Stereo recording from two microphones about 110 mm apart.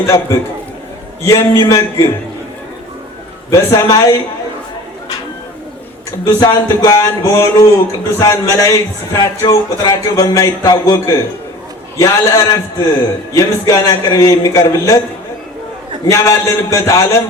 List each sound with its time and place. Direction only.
0.0 s a man's voice: 30° left (ahead or behind)
3.5 s a man's voice: 30° left (ahead or behind)
6.1 s a man's voice: 35° left (ahead or behind)
16.0 s a man's voice: 30° left (ahead or behind)